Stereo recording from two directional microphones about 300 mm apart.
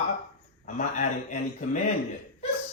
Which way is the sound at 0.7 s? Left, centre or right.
Left.